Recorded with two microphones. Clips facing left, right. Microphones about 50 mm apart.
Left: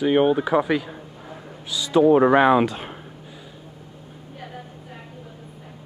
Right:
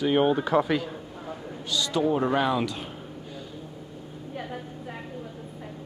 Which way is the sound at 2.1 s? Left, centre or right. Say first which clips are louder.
Left 9 dB; left.